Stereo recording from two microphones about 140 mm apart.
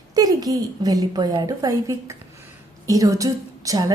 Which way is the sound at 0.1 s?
25° right (ahead or behind).